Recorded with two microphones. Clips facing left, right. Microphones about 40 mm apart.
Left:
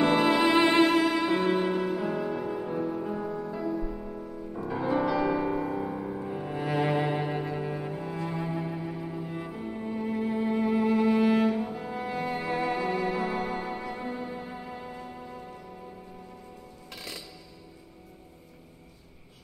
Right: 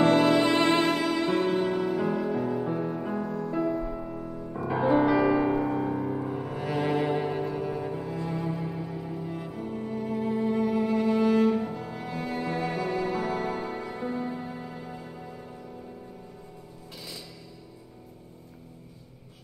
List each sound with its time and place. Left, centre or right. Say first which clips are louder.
0.0 s music: right 2 dB; centre
2.6 s music: right 1 dB; centre
3.5 s music: right 4 dB; right
6.2 s music: right 1 dB; centre